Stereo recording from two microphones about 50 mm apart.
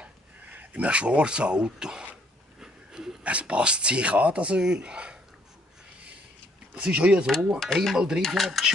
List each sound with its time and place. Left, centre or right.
0.0 s a sound: right
0.8 s speech: right
2.6 s a sound: centre
3.3 s speech: right
6.7 s speech: right
7.2 s speech: centre